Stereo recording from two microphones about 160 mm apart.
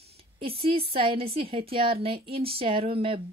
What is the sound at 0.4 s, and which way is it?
Speech, 35° right (ahead or behind).